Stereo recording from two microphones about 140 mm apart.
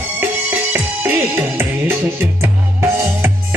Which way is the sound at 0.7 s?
15° right (ahead or behind).